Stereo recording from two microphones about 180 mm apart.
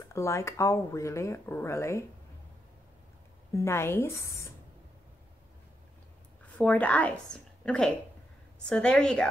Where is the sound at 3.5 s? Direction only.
15° left (ahead or behind).